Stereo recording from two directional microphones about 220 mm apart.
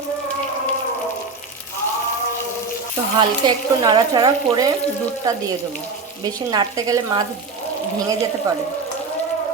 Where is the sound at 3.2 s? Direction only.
20° right (ahead or behind).